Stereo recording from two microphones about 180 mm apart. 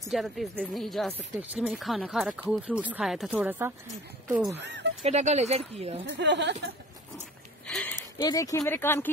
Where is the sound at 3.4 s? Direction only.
10° right (ahead or behind).